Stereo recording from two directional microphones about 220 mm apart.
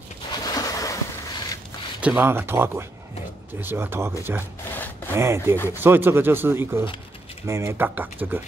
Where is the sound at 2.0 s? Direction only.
5° right (ahead or behind).